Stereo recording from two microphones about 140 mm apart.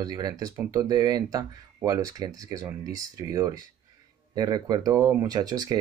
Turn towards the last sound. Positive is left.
turn(degrees=-30)  # may be behind; listen again after turning